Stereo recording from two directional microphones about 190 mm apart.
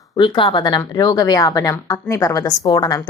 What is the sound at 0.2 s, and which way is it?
A woman's voice, 25° left (ahead or behind).